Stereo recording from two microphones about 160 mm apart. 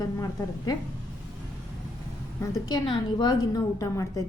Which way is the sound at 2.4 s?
20° left (ahead or behind).